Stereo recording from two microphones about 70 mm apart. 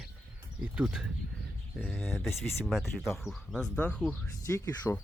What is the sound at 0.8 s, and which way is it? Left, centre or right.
Speech, centre.